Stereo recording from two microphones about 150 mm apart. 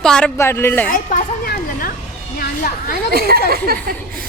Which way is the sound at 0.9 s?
70° left (ahead or behind).